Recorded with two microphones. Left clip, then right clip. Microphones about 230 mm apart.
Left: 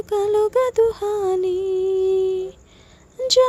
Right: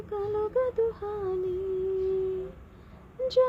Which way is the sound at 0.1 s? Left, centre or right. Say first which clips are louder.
Left 11 dB; left.